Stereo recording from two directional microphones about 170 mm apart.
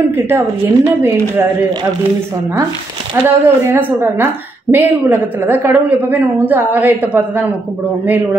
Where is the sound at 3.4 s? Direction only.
15° right (ahead or behind).